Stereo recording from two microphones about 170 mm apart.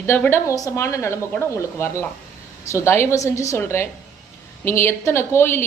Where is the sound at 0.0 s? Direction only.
15° left (ahead or behind).